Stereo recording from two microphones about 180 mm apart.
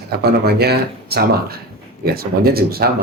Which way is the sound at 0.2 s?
65° right (ahead or behind).